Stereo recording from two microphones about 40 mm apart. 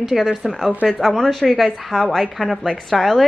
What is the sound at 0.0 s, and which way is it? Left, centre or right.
Speech, centre.